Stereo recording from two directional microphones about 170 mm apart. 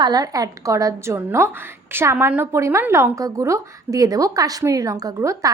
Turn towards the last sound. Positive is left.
turn(degrees=-20)  # may be behind; listen again after turning